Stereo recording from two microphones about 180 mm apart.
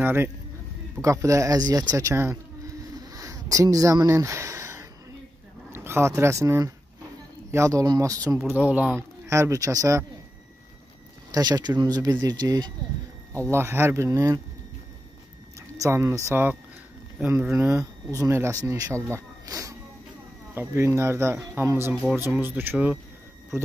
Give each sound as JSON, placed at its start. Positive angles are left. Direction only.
{"t": 0.0, "sound": "speech", "side_deg": -10}
{"t": 11.3, "sound": "speech", "side_deg": -20}
{"t": 15.8, "sound": "speech", "side_deg": -15}